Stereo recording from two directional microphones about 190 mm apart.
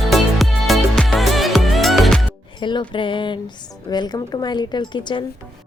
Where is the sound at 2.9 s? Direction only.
25° left (ahead or behind).